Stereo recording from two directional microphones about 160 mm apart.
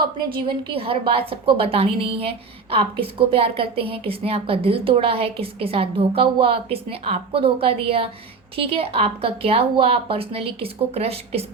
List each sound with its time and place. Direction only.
0.0 s a woman's voice: 30° right (ahead or behind)